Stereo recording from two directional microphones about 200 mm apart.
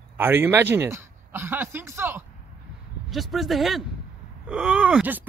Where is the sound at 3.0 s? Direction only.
Centre (ahead or behind).